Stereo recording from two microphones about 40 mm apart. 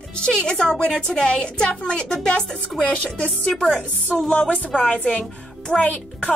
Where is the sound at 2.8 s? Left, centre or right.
Left.